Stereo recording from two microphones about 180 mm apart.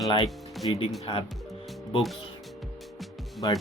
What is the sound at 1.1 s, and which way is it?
Speech, 25° left (ahead or behind).